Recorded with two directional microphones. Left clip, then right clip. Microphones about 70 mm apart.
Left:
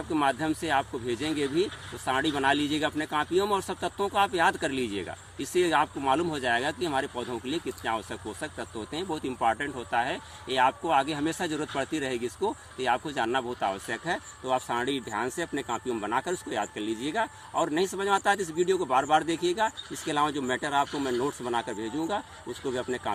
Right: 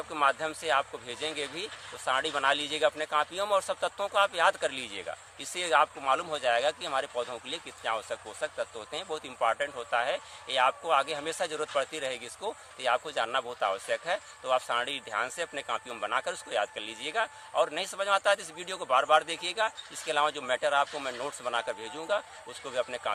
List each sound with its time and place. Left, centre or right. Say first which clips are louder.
0.1 s speech: left 1 dB; right